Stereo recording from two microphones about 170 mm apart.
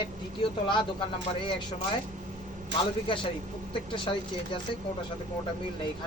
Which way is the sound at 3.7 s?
30° left (ahead or behind).